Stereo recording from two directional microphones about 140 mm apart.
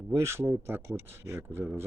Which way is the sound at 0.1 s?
20° right (ahead or behind).